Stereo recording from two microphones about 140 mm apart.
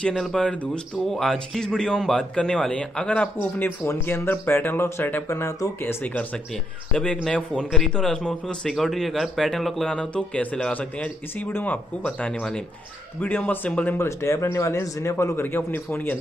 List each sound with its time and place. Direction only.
0.1 s a man's voice: 5° left (ahead or behind)